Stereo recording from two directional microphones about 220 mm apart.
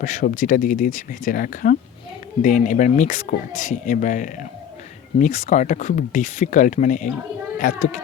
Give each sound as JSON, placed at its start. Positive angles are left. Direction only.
{"t": 0.0, "sound": "speech", "side_deg": 35}